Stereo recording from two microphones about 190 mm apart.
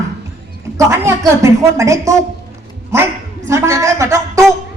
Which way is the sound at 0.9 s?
15° right (ahead or behind).